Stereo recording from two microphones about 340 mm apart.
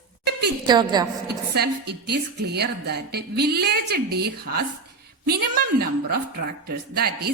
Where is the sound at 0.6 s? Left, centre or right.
Centre.